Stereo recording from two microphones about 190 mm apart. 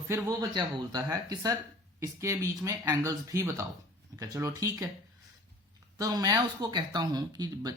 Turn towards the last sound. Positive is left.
turn(degrees=-20)  # may be behind; listen again after turning